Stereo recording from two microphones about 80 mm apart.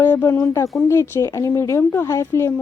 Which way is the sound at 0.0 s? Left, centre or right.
Left.